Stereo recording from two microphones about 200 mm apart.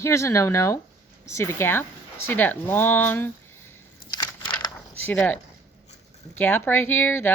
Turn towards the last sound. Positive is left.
turn(degrees=10)  # may be behind; listen again after turning